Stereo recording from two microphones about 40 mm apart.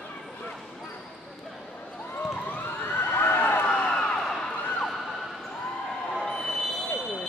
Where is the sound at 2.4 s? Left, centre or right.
Left.